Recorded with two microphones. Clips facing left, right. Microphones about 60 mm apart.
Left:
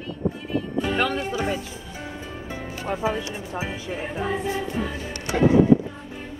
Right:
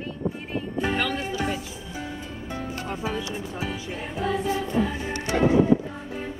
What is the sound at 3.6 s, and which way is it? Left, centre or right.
Music, left.